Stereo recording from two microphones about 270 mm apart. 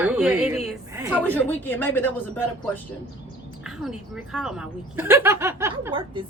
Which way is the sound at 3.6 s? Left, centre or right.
Centre.